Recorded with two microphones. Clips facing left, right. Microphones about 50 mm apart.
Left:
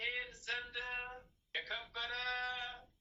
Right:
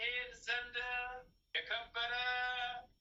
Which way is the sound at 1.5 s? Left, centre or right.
Right.